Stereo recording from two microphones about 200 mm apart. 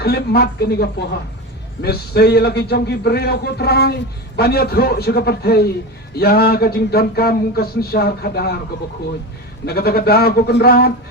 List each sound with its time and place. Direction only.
0.0 s a man's voice: 50° left (ahead or behind)
9.6 s a man's voice: 50° left (ahead or behind)